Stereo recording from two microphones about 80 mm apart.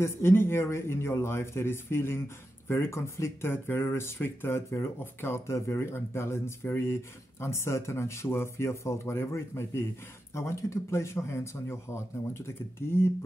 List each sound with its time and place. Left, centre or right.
0.0 s a man's voice: left